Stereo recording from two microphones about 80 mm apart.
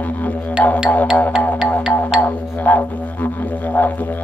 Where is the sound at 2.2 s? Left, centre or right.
Left.